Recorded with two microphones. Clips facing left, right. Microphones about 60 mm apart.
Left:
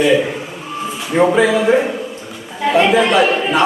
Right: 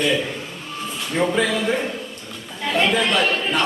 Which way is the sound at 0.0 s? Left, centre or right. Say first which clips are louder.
Left 8 dB; centre.